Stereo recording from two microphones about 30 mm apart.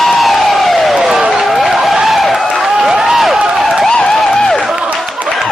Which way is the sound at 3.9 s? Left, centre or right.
Left.